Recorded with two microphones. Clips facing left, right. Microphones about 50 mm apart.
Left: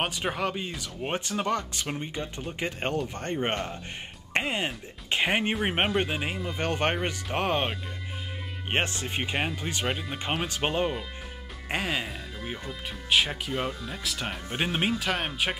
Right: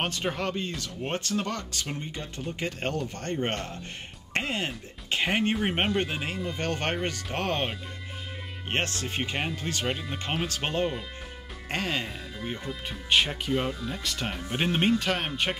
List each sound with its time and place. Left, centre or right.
0.0 s speech: centre